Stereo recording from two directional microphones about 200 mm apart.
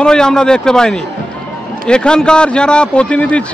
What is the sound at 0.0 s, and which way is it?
Speech, 5° left (ahead or behind).